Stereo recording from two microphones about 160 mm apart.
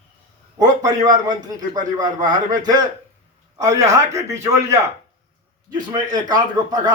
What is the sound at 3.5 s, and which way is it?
A man's voice, 20° right (ahead or behind).